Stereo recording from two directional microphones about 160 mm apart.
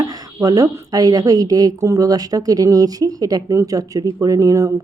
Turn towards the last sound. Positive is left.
turn(degrees=-20)  # may be behind; listen again after turning